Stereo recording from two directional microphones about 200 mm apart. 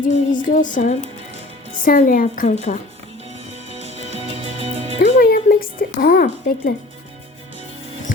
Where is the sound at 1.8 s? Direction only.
40° left (ahead or behind).